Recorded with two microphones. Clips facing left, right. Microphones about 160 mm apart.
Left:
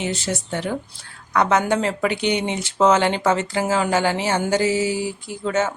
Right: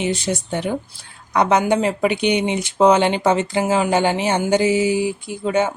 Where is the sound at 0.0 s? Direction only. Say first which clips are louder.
Right 4 dB; 15° right (ahead or behind).